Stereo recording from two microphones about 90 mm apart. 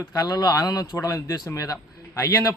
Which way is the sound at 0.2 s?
45° left (ahead or behind).